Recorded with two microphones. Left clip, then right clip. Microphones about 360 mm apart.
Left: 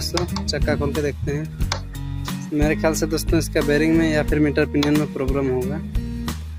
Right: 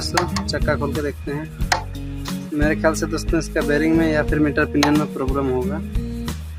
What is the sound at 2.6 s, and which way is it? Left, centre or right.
Speech, left.